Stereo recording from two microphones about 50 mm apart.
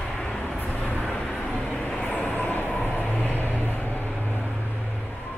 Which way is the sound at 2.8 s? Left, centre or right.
Left.